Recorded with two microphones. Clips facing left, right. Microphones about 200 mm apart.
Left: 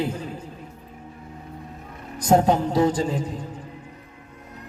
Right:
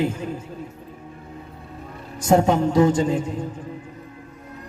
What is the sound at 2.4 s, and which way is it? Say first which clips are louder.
Speech: right 2 dB; 35° left (ahead or behind).